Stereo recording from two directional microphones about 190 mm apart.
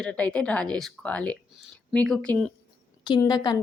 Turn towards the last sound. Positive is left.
turn(degrees=20)  # may be behind; listen again after turning